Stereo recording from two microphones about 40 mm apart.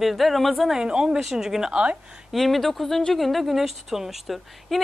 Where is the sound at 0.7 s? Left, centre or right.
Centre.